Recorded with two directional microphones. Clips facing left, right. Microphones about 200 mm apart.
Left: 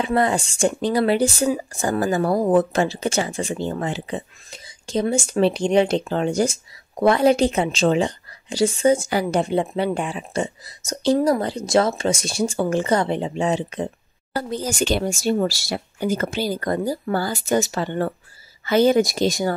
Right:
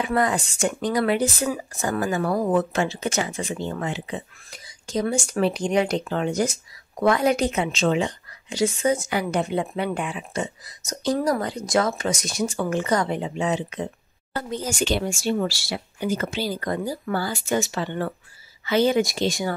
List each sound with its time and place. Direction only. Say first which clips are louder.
0.0 s speech: left 3 dB; 30° left (ahead or behind)